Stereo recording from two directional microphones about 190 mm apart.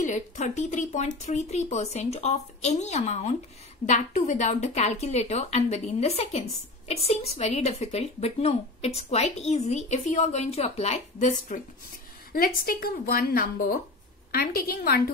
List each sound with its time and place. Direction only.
0.0 s a woman's voice: 40° left (ahead or behind)